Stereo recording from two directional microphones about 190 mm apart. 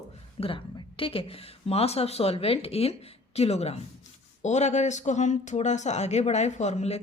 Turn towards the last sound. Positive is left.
turn(degrees=35)  # may be behind; listen again after turning